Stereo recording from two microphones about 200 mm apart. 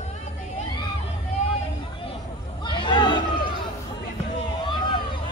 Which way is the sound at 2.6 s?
25° left (ahead or behind).